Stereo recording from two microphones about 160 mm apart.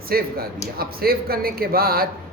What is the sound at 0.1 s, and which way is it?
Speech, 70° right (ahead or behind).